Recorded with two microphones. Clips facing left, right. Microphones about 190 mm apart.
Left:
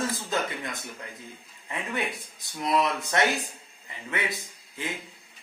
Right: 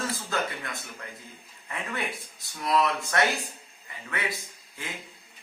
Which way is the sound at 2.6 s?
20° left (ahead or behind).